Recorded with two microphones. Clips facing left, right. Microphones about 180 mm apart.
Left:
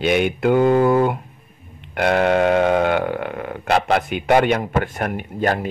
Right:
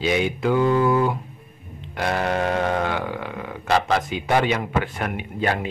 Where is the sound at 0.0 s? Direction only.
60° left (ahead or behind).